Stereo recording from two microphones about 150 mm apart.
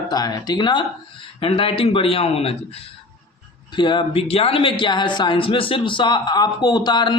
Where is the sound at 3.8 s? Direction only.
30° left (ahead or behind).